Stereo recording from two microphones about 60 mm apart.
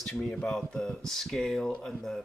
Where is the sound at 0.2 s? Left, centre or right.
Centre.